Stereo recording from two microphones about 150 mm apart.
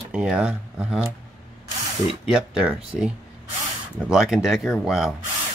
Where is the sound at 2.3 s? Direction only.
5° right (ahead or behind).